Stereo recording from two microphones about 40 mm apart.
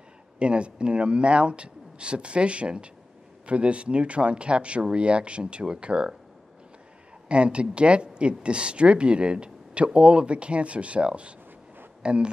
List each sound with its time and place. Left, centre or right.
0.4 s speech: right
7.2 s speech: right